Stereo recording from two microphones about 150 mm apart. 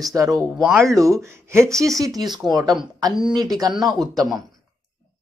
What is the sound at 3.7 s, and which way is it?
Speech, centre (ahead or behind).